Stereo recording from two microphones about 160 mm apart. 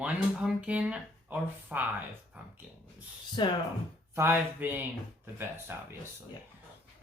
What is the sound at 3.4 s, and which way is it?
Speech, 30° left (ahead or behind).